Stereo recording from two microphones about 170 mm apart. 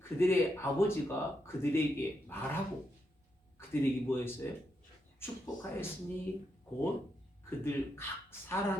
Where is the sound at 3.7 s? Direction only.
15° left (ahead or behind).